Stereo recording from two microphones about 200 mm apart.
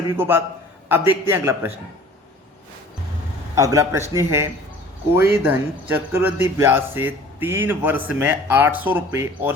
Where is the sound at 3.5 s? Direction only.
15° right (ahead or behind).